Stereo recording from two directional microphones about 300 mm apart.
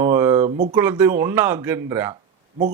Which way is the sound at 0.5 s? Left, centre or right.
Right.